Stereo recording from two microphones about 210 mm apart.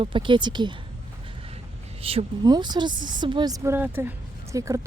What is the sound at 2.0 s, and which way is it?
A woman's voice, 25° right (ahead or behind).